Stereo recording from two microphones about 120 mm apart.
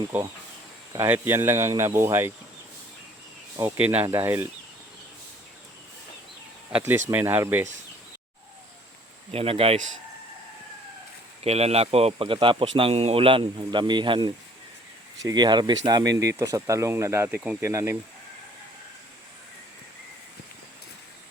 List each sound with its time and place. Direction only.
0.1 s speech: 15° right (ahead or behind)
3.8 s speech: 10° right (ahead or behind)
6.7 s speech: 10° right (ahead or behind)
9.3 s speech: 55° right (ahead or behind)
11.4 s a man's voice: 60° right (ahead or behind); by 17.7 s 15° right (ahead or behind)
17.7 s speech: 25° right (ahead or behind)